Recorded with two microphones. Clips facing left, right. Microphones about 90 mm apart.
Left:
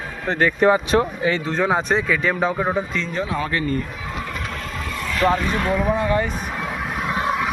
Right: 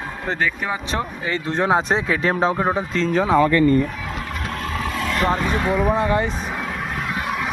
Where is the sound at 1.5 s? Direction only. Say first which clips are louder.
Right 4 dB; 15° right (ahead or behind).